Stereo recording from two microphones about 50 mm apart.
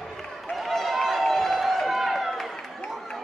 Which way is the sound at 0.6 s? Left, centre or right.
Centre.